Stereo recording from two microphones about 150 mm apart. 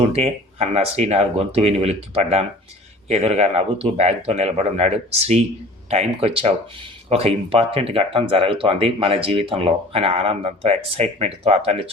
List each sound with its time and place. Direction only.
0.1 s speech: 45° right (ahead or behind)